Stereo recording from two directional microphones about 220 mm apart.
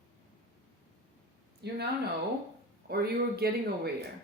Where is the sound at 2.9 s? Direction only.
45° right (ahead or behind).